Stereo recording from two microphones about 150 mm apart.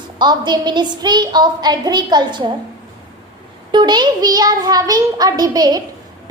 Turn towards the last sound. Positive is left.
turn(degrees=-25)  # may be behind; listen again after turning